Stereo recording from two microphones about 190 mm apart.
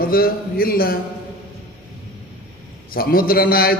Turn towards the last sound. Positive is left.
turn(degrees=50)  # may be behind; listen again after turning